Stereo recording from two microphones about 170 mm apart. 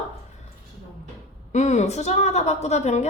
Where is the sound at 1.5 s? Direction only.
45° left (ahead or behind).